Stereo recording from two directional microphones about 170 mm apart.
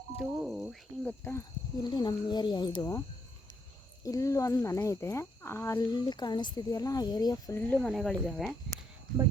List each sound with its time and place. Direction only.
0.2 s speech: 5° right (ahead or behind)
1.0 s speech: 15° left (ahead or behind)
4.0 s speech: 20° left (ahead or behind)
7.7 s speech: 5° left (ahead or behind)